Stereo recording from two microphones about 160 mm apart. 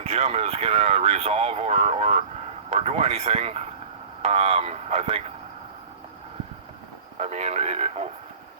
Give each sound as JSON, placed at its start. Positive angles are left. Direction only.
{"t": 0.0, "sound": "speech", "side_deg": -40}
{"t": 7.2, "sound": "speech", "side_deg": -45}